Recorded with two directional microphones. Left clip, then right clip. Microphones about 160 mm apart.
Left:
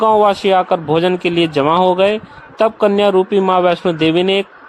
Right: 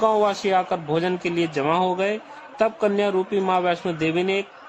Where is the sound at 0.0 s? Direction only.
40° left (ahead or behind).